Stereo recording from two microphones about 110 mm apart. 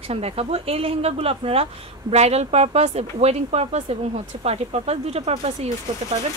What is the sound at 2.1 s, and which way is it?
Speech, 80° right.